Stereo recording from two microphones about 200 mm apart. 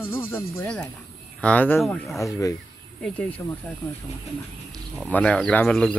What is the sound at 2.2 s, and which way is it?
Speech, 15° left (ahead or behind).